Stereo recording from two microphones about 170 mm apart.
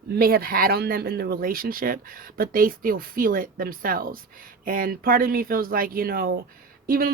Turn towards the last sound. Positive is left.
turn(degrees=-60)  # may be behind; listen again after turning